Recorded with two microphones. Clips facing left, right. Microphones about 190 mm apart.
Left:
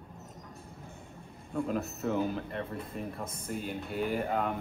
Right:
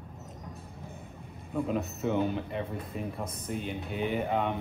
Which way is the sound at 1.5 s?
Centre (ahead or behind).